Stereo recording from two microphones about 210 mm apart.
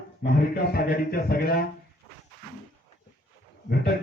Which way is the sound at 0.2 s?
45° left (ahead or behind).